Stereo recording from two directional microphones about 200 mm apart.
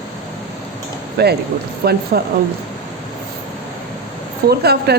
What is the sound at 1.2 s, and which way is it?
A woman's voice, 55° right (ahead or behind).